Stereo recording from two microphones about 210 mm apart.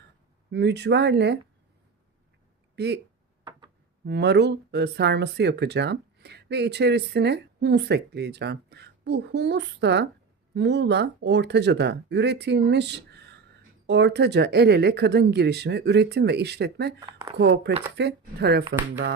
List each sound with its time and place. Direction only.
0.5 s speech: 55° right (ahead or behind)
2.7 s speech: 55° right (ahead or behind)
4.0 s speech: 55° right (ahead or behind)